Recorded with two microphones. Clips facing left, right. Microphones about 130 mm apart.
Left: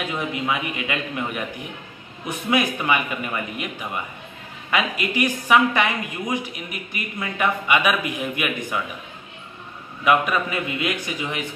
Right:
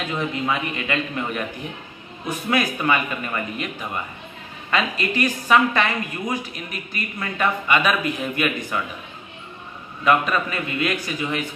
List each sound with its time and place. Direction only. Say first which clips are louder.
0.0 s a woman's voice: right 1 dB; 10° left (ahead or behind)
10.0 s a woman's voice: even; 15° left (ahead or behind)